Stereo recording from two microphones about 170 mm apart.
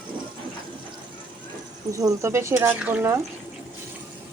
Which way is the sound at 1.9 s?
20° right (ahead or behind).